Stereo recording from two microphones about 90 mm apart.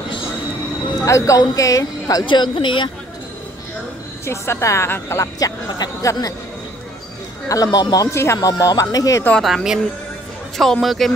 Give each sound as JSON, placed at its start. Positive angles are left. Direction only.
{"t": 1.0, "sound": "a woman's voice", "side_deg": 35}
{"t": 2.2, "sound": "speech", "side_deg": 60}
{"t": 4.3, "sound": "a woman's voice", "side_deg": 30}
{"t": 5.2, "sound": "a woman's voice", "side_deg": 40}
{"t": 7.4, "sound": "a woman's voice", "side_deg": 40}
{"t": 8.5, "sound": "a woman's voice", "side_deg": 40}
{"t": 9.4, "sound": "speech", "side_deg": 0}